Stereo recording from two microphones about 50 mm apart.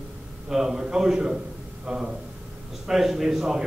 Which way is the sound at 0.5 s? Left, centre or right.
Centre.